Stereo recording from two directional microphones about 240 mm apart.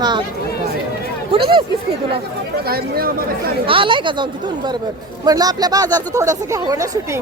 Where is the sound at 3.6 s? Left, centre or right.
Right.